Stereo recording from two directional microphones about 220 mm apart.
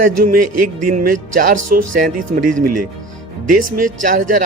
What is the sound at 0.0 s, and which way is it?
Speech, 40° right (ahead or behind).